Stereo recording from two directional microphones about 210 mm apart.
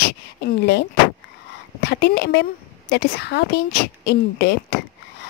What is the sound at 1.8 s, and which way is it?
A woman's voice, 50° left (ahead or behind).